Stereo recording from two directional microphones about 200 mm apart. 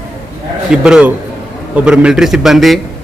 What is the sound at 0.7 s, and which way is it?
A man's voice, 5° right (ahead or behind).